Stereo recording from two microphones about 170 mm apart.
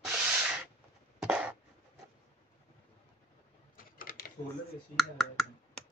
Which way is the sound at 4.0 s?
55° left (ahead or behind).